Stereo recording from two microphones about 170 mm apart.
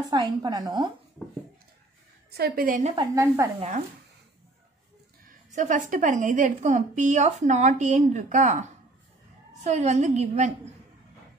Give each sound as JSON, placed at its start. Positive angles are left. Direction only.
{"t": 0.1, "sound": "a woman's voice", "side_deg": -25}
{"t": 2.3, "sound": "a woman's voice", "side_deg": -60}
{"t": 3.0, "sound": "a woman's voice", "side_deg": -15}
{"t": 5.5, "sound": "a woman's voice", "side_deg": -45}